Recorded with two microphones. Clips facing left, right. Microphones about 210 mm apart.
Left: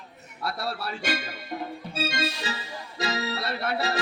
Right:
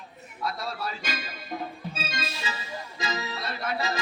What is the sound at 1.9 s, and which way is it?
Organ, 70° left (ahead or behind).